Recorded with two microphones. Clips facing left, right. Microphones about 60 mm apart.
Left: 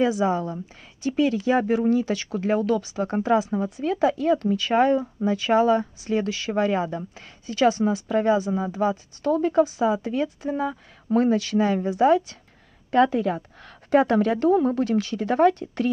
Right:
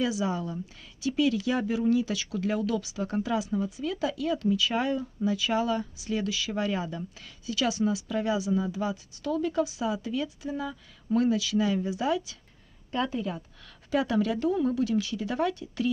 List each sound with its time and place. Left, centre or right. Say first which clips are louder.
0.0 s speech: left 7 dB; left
12.9 s speech: left 10 dB; left
13.7 s a woman's voice: left 8 dB; left